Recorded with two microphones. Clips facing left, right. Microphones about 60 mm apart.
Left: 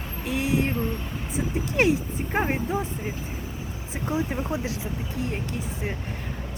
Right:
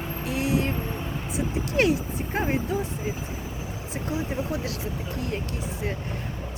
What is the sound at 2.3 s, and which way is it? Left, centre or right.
Speech, left.